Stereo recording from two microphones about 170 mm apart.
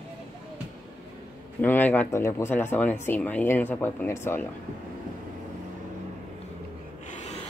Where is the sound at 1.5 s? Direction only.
10° left (ahead or behind).